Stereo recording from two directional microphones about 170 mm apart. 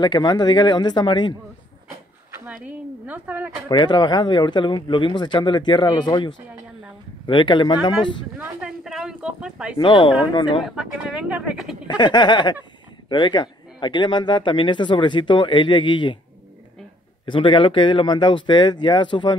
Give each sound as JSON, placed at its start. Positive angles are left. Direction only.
{"t": 0.0, "sound": "speech", "side_deg": 25}
{"t": 2.3, "sound": "speech", "side_deg": -10}
{"t": 3.6, "sound": "speech", "side_deg": 25}
{"t": 8.4, "sound": "a sound", "side_deg": -5}
{"t": 9.8, "sound": "speech", "side_deg": 30}
{"t": 10.6, "sound": "speech", "side_deg": 0}
{"t": 11.9, "sound": "speech", "side_deg": 25}
{"t": 17.3, "sound": "speech", "side_deg": 30}